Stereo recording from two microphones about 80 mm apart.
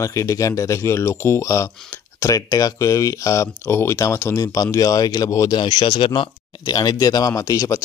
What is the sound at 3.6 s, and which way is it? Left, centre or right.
Speech, left.